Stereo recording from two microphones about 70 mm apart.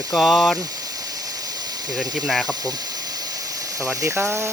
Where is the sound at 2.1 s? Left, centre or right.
Centre.